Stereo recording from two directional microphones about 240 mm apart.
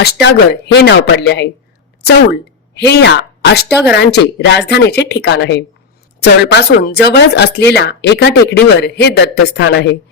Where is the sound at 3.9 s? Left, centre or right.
Left.